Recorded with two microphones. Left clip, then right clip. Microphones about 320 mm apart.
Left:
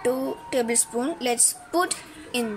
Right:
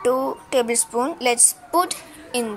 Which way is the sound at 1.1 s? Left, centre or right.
Centre.